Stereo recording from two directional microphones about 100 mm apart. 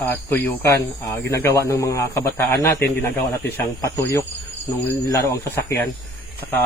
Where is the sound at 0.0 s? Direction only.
25° left (ahead or behind).